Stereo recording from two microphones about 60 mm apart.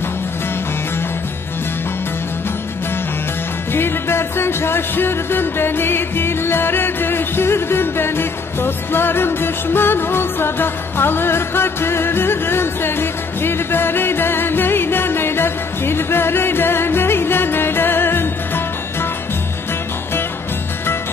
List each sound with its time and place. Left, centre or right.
3.7 s music: left